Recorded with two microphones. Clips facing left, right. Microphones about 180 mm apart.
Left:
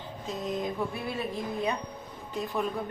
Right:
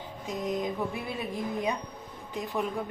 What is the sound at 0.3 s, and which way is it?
A woman's voice, 15° right (ahead or behind).